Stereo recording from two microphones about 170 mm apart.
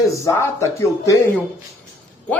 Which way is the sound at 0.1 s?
20° left (ahead or behind).